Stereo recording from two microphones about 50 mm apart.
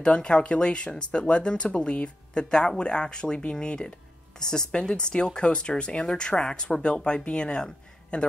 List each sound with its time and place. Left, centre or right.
0.0 s speech: centre